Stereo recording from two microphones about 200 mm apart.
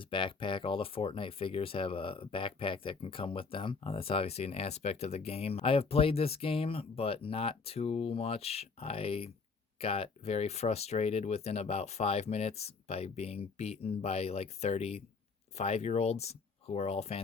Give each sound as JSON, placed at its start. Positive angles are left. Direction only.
{"t": 0.0, "sound": "speech", "side_deg": 25}